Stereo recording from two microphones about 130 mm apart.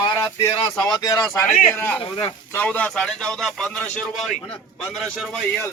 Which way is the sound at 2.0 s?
45° left (ahead or behind).